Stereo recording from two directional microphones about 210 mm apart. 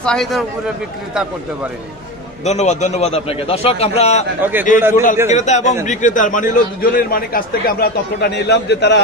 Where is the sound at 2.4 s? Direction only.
35° left (ahead or behind).